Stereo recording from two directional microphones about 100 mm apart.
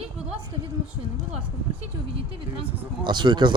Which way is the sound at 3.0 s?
50° right (ahead or behind).